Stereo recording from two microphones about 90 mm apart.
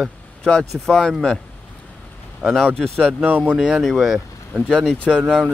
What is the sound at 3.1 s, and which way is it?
Speech, 15° right (ahead or behind).